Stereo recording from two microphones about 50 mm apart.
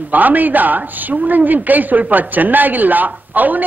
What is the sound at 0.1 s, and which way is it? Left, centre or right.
A woman's voice, right.